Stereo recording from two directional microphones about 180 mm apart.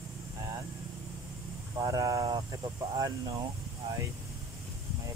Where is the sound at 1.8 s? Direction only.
20° right (ahead or behind).